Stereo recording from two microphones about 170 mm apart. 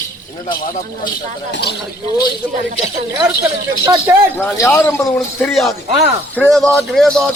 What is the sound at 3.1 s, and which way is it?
Speech, 20° right (ahead or behind).